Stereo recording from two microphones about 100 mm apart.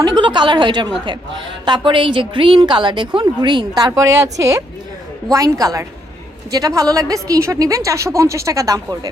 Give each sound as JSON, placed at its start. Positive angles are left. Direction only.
{"t": 0.0, "sound": "a woman's voice", "side_deg": -45}
{"t": 3.9, "sound": "a woman's voice", "side_deg": -35}